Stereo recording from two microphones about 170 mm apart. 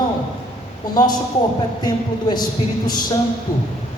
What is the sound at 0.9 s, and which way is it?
Speech, 25° left (ahead or behind).